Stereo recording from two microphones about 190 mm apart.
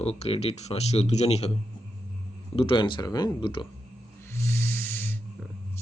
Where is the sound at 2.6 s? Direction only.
25° left (ahead or behind).